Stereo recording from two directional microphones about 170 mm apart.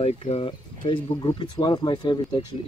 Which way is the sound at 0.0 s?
35° left (ahead or behind).